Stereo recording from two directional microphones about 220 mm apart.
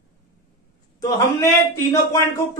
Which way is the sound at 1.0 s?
15° left (ahead or behind).